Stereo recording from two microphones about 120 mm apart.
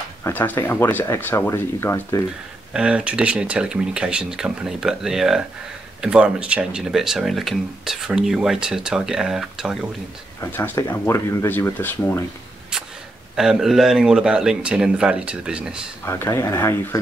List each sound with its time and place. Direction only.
0.2 s speech: 15° left (ahead or behind)
2.7 s speech: 10° right (ahead or behind)
10.4 s speech: 15° left (ahead or behind)
13.4 s speech: 5° right (ahead or behind)
16.1 s speech: 25° left (ahead or behind)